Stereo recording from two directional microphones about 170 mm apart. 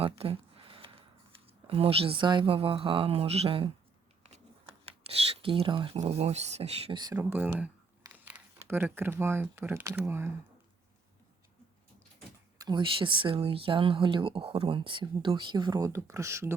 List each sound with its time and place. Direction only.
0.0 s a sound: 35° right (ahead or behind)
1.6 s speech: 35° right (ahead or behind)
4.9 s speech: 35° right (ahead or behind)
7.2 s speech: 10° right (ahead or behind)
12.5 s speech: 25° right (ahead or behind)